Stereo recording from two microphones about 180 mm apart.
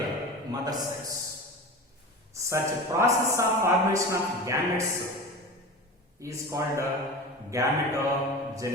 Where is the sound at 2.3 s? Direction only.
15° right (ahead or behind).